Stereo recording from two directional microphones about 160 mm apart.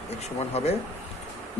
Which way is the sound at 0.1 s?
40° left (ahead or behind).